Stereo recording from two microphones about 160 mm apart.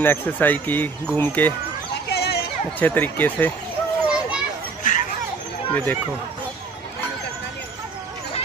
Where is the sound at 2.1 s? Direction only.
90° left.